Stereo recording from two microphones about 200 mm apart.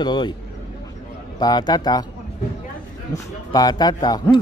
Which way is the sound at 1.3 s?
20° left (ahead or behind).